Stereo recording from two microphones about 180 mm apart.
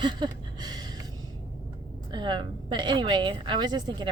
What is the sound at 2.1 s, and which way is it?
Speech, 25° right (ahead or behind).